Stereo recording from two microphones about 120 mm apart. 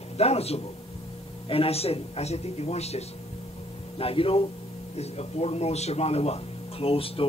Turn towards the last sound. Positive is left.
turn(degrees=50)  # may be behind; listen again after turning